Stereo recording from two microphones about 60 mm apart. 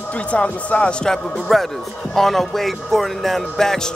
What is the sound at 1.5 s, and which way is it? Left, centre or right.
Speech, centre.